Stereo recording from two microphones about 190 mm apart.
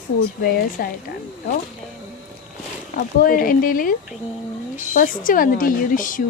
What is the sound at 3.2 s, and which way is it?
Speech, 45° left (ahead or behind).